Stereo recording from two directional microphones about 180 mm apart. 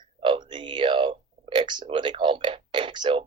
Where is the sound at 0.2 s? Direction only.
25° right (ahead or behind).